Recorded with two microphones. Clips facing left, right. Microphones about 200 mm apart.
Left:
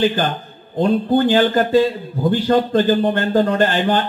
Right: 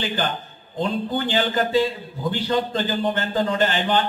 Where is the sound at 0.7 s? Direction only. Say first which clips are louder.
Left 8 dB; 55° left (ahead or behind).